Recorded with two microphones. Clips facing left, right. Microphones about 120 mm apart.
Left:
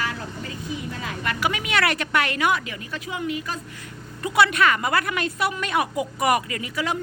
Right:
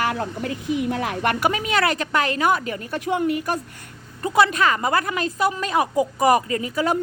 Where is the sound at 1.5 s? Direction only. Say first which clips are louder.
Even; 35° right (ahead or behind); by 3.6 s 55° right (ahead or behind).